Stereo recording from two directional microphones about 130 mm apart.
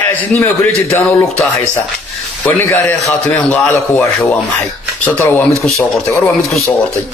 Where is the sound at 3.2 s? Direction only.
5° left (ahead or behind).